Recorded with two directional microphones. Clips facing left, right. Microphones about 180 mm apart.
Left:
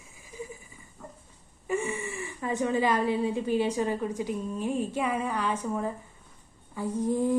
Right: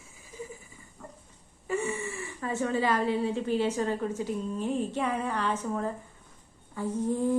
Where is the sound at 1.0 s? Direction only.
Centre (ahead or behind).